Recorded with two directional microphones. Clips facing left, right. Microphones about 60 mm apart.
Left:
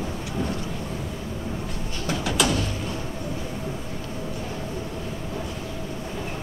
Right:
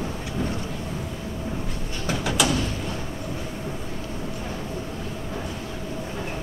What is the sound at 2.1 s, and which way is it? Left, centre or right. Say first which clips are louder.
Bird: even; centre.